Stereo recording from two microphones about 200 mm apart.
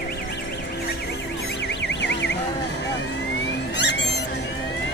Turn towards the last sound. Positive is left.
turn(degrees=60)  # may be behind; listen again after turning